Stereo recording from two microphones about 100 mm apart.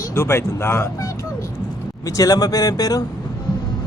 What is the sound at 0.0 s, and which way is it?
Speech, 25° left (ahead or behind).